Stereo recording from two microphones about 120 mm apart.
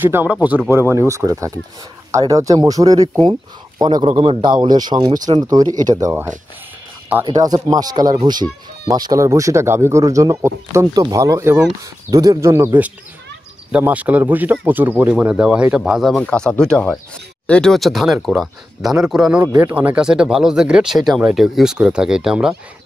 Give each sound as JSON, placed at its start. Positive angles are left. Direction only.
{"t": 0.0, "sound": "speech", "side_deg": -15}
{"t": 4.0, "sound": "speech", "side_deg": -50}
{"t": 7.2, "sound": "speech", "side_deg": -35}
{"t": 19.4, "sound": "speech", "side_deg": -15}